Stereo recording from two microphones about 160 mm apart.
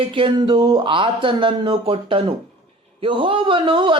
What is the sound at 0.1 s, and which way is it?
Speech, 30° right (ahead or behind).